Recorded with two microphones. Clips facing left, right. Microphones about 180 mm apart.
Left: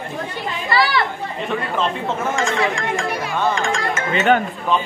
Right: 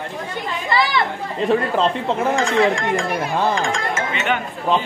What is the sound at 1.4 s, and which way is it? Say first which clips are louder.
Speech: right 5 dB; 35° right (ahead or behind).